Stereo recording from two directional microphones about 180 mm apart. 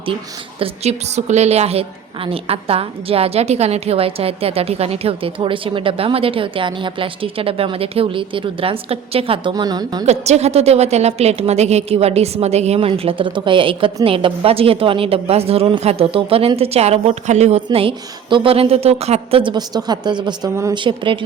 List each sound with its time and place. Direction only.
0.6 s a woman's voice: 35° right (ahead or behind)
10.1 s a woman's voice: 35° right (ahead or behind)